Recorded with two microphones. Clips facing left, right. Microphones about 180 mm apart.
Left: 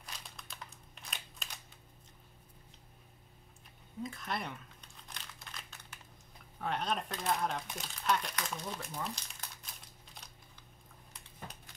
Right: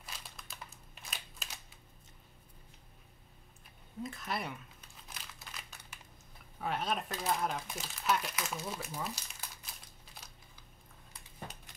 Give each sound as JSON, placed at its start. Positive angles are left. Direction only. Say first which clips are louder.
{"t": 0.0, "sound": "a sound", "louder": "even", "side_deg": -5}
{"t": 4.0, "sound": "crumpling", "louder": "even", "side_deg": -5}
{"t": 6.6, "sound": "speech", "louder": "even", "side_deg": -5}
{"t": 10.1, "sound": "crumpling", "louder": "right 1 dB", "side_deg": -5}